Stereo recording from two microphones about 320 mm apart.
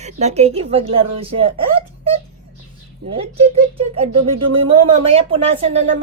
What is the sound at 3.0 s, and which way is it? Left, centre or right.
Speech, right.